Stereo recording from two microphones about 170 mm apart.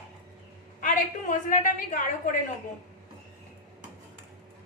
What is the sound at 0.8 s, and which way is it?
A woman's voice, 50° left (ahead or behind).